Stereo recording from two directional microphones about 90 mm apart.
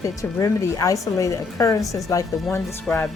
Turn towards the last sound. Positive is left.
turn(degrees=15)  # may be behind; listen again after turning